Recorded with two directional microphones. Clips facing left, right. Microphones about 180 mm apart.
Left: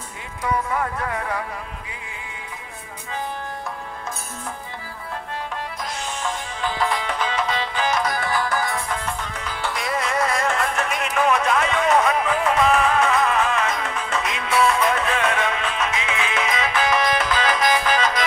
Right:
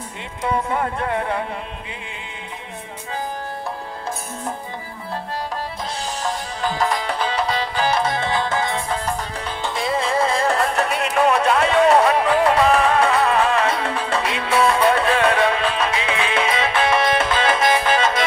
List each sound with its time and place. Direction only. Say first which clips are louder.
0.4 s speech: right 2 dB; 25° right (ahead or behind)
5.9 s music: right 3 dB; 35° right (ahead or behind)